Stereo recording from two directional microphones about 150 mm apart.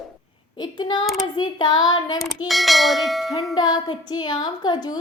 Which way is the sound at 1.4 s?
30° left (ahead or behind).